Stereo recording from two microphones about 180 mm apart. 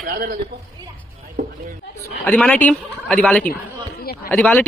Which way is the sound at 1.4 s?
50° right (ahead or behind).